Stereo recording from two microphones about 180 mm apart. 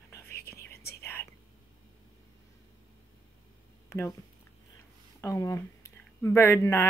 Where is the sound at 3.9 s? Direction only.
15° left (ahead or behind).